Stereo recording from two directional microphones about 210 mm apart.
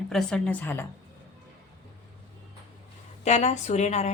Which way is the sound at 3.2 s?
35° left (ahead or behind).